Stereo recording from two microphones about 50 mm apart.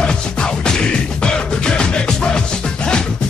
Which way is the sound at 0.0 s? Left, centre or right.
Centre.